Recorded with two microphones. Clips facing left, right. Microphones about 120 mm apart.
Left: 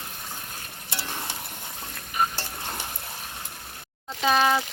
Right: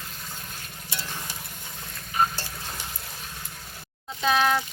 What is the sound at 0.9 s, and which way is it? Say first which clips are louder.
Music: left 3 dB; 70° left (ahead or behind).